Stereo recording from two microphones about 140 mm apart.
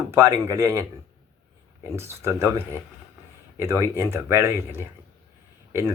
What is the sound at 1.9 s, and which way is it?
A man's voice, 20° right (ahead or behind).